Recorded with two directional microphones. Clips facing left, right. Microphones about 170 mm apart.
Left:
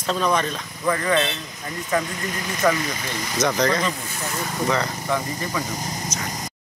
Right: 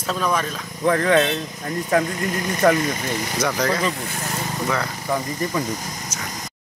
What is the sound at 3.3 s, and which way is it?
Speech, 5° right (ahead or behind).